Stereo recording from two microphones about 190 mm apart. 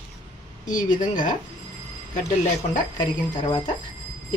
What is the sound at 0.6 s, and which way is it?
Speech, 40° left (ahead or behind).